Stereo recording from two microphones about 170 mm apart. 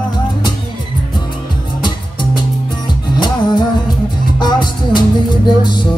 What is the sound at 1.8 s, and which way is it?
Music, 25° left (ahead or behind).